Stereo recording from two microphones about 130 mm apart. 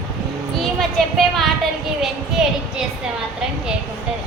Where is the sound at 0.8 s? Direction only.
Centre (ahead or behind).